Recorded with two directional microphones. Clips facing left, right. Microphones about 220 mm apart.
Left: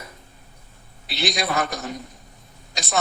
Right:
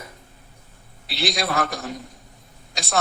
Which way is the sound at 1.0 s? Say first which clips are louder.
Even; centre (ahead or behind).